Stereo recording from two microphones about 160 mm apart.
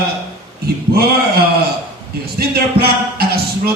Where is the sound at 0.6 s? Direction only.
75° right (ahead or behind).